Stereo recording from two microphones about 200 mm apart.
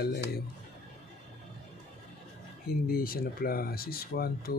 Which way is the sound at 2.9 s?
50° left (ahead or behind).